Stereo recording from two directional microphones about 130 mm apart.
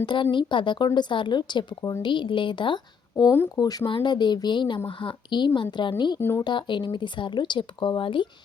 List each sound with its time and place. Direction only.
0.0 s speech: 35° left (ahead or behind)
2.0 s speech: 40° left (ahead or behind)
3.3 s speech: 15° left (ahead or behind)
3.6 s speech: 30° left (ahead or behind)
6.1 s speech: 20° left (ahead or behind)
6.4 s speech: 35° left (ahead or behind)